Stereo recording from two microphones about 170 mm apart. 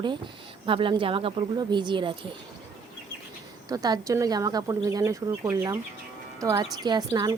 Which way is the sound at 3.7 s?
20° right (ahead or behind).